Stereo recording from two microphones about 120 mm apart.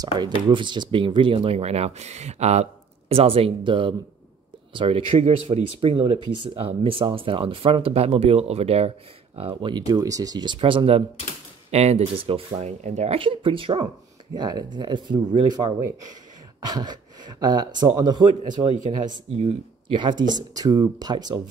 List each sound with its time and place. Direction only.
0.5 s speech: 40° right (ahead or behind)
11.7 s speech: 60° right (ahead or behind)
12.6 s speech: 70° right (ahead or behind)
13.2 s speech: 45° right (ahead or behind)
14.3 s speech: 35° right (ahead or behind)
19.3 s speech: 50° right (ahead or behind)